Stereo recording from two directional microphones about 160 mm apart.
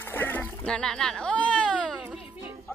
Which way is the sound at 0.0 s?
15° left (ahead or behind).